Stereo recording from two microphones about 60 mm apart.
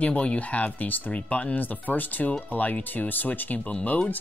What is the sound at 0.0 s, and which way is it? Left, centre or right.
Speech, left.